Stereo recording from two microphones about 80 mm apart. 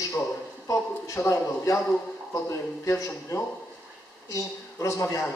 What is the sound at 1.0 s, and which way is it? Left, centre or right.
A man's voice, left.